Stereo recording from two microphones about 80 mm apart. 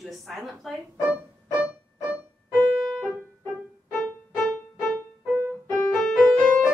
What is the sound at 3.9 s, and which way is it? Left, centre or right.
Music, centre.